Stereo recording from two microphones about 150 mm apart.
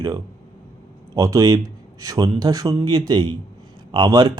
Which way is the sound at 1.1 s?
20° right (ahead or behind).